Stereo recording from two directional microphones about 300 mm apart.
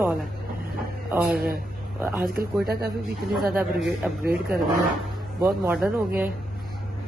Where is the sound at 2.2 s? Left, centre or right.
Right.